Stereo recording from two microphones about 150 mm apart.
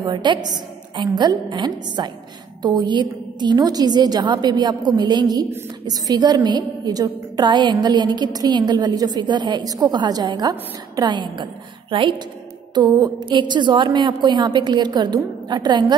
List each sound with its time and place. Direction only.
0.0 s a woman's voice: 30° right (ahead or behind)